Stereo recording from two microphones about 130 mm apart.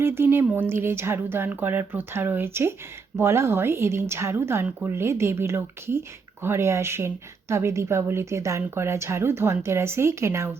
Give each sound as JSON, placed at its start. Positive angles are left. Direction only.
{"t": 0.0, "sound": "speech", "side_deg": -20}